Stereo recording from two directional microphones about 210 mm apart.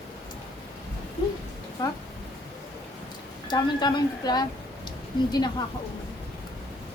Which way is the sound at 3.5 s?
20° left (ahead or behind).